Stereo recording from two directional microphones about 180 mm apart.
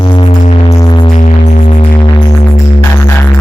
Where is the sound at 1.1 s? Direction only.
40° left (ahead or behind).